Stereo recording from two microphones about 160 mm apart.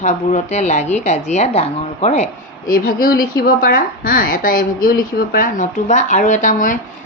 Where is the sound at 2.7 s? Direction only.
65° left (ahead or behind).